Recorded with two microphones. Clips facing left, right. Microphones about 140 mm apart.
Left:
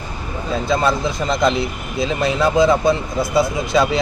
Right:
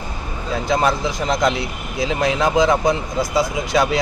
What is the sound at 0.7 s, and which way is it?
A man's voice, 20° right (ahead or behind).